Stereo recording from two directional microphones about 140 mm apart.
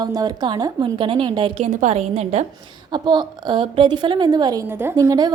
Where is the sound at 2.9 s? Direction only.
30° right (ahead or behind).